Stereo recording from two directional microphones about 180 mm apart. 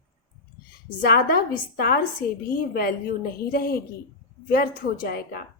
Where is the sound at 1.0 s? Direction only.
55° left (ahead or behind).